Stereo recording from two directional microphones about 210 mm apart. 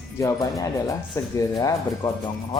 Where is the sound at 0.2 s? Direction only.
15° left (ahead or behind).